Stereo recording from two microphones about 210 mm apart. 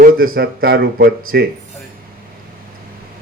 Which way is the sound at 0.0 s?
45° right (ahead or behind).